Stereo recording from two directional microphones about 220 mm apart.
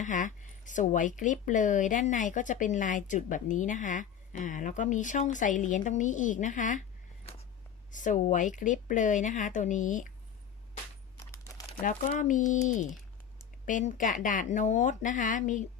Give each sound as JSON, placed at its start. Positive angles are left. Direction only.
{"t": 0.0, "sound": "speech", "side_deg": 35}
{"t": 7.9, "sound": "speech", "side_deg": 35}
{"t": 11.2, "sound": "crumpling", "side_deg": 15}
{"t": 11.8, "sound": "speech", "side_deg": 35}